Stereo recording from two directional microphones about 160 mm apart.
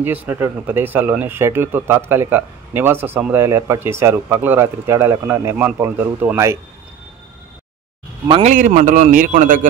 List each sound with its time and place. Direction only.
0.0 s speech: 10° right (ahead or behind)
8.4 s speech: 50° right (ahead or behind)